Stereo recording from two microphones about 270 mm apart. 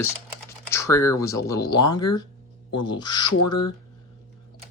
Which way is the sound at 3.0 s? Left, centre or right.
Centre.